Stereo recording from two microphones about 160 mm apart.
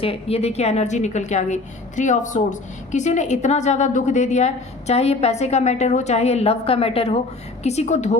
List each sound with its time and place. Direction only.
0.0 s a woman's voice: 35° left (ahead or behind)